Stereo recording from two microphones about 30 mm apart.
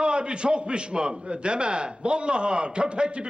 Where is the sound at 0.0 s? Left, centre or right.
Right.